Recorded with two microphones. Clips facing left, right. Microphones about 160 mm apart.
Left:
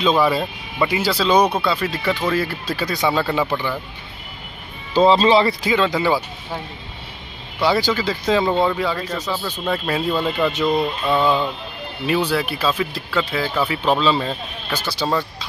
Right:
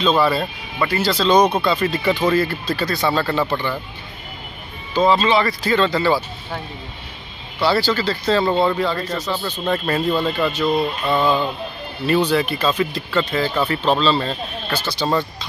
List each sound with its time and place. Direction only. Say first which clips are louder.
0.0 s speech: even; 15° left (ahead or behind)
4.9 s speech: left 2 dB; 30° left (ahead or behind)
5.6 s speech: right 1 dB; 15° left (ahead or behind)
7.6 s speech: even; 15° left (ahead or behind)
10.4 s speech: left 2 dB; 15° left (ahead or behind)